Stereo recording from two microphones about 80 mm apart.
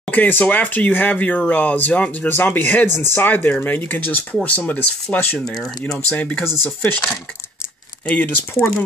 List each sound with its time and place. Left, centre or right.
0.1 s speech: left
6.4 s speech: left
6.8 s speech: left
8.1 s speech: left